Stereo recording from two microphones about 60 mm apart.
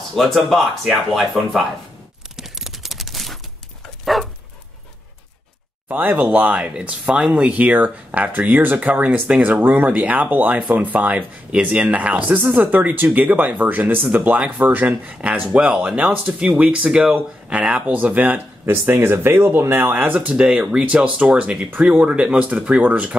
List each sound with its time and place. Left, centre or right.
0.1 s speech: centre
2.3 s a sound: centre
4.0 s dog: centre
5.9 s speech: right
20.2 s speech: centre